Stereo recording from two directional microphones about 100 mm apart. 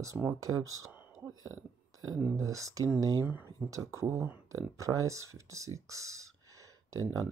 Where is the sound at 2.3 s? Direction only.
30° right (ahead or behind).